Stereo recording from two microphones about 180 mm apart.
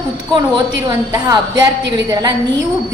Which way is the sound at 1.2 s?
20° right (ahead or behind).